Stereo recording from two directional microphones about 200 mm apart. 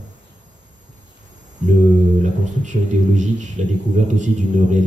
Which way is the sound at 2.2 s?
35° right (ahead or behind).